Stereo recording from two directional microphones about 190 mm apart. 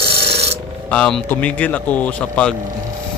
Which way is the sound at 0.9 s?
5° left (ahead or behind).